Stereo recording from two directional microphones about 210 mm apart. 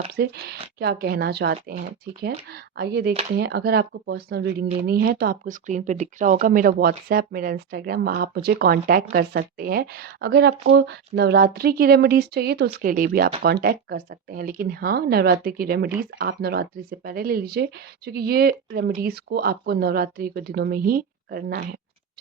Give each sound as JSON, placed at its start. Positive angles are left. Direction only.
{"t": 0.2, "sound": "speech", "side_deg": -50}
{"t": 3.1, "sound": "speech", "side_deg": -30}
{"t": 3.3, "sound": "speech", "side_deg": -50}